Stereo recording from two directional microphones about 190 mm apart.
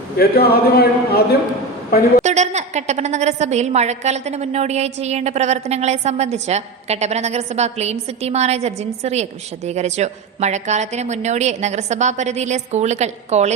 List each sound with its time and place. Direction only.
0.2 s a man's voice: 55° left (ahead or behind)
2.2 s a woman's voice: 35° right (ahead or behind)